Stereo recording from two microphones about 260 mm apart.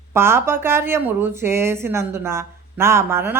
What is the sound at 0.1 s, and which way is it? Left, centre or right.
Speech, centre.